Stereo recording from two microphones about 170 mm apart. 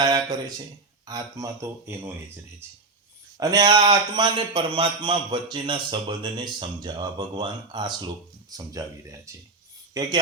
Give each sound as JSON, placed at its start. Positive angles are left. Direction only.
{"t": 0.0, "sound": "a man's voice", "side_deg": -25}